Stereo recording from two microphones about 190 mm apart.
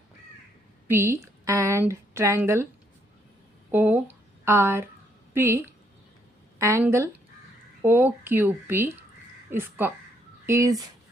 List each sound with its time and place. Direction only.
0.9 s a woman's voice: 15° right (ahead or behind)
3.7 s speech: 10° right (ahead or behind)